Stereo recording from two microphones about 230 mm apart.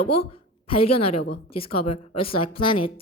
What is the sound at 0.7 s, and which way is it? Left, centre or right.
A woman's voice, left.